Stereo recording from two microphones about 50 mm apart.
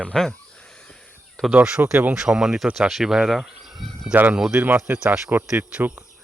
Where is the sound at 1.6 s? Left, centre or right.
Right.